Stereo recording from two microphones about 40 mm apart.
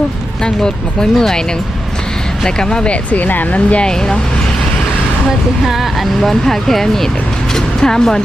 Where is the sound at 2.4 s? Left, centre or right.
Centre.